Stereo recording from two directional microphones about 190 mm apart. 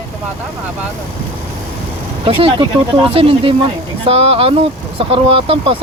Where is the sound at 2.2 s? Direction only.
30° right (ahead or behind).